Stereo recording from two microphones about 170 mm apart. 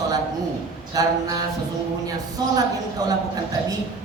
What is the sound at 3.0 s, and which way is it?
Speech, 20° right (ahead or behind).